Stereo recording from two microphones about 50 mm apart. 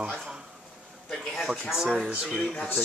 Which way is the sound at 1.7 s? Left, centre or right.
Centre.